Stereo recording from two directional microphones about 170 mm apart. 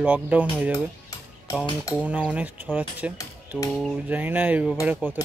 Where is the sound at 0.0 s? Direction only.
10° right (ahead or behind).